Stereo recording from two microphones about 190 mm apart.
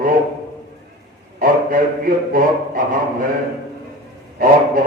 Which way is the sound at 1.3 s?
50° right (ahead or behind).